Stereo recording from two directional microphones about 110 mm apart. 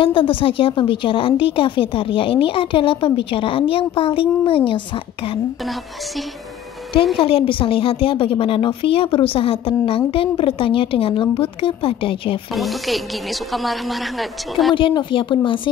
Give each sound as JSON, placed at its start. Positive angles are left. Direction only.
{"t": 0.0, "sound": "speech", "side_deg": 50}
{"t": 7.2, "sound": "a woman's voice", "side_deg": 55}
{"t": 12.5, "sound": "speech", "side_deg": 0}
{"t": 14.7, "sound": "speech", "side_deg": 45}